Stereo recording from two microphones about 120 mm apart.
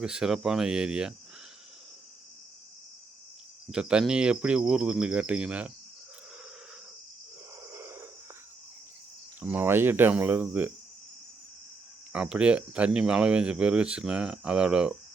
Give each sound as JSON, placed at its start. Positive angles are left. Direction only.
{"t": 0.0, "sound": "speech", "side_deg": -5}
{"t": 3.7, "sound": "speech", "side_deg": -10}
{"t": 7.7, "sound": "a sound", "side_deg": -20}
{"t": 9.4, "sound": "speech", "side_deg": -15}
{"t": 12.1, "sound": "speech", "side_deg": -10}